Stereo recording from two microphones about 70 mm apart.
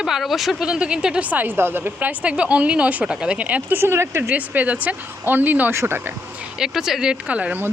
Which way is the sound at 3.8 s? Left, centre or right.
Right.